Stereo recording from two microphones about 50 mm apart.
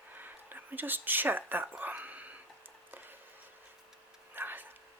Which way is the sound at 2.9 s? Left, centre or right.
Right.